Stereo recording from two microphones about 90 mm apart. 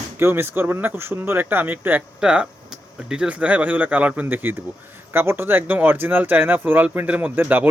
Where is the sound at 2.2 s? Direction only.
10° right (ahead or behind).